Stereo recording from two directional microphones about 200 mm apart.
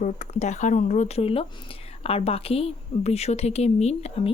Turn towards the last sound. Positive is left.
turn(degrees=35)  # may be behind; listen again after turning